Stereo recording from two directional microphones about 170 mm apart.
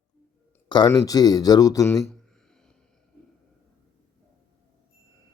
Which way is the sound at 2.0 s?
5° left (ahead or behind).